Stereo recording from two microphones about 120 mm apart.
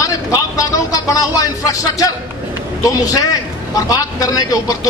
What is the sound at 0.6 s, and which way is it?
A man's voice, 30° left (ahead or behind).